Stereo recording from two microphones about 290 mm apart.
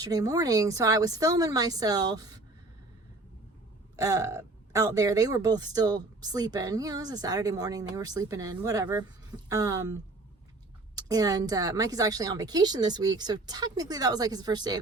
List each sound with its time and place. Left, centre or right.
0.0 s speech: centre
3.9 s speech: centre